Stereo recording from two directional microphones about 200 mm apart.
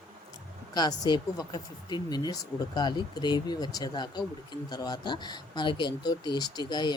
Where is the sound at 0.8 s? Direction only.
20° left (ahead or behind).